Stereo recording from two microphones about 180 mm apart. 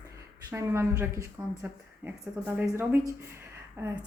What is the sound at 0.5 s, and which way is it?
Speech, 15° right (ahead or behind).